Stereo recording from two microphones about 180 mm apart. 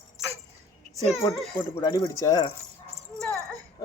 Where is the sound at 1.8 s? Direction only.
25° left (ahead or behind).